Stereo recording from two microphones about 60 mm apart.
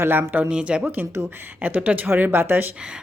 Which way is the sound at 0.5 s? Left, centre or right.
Centre.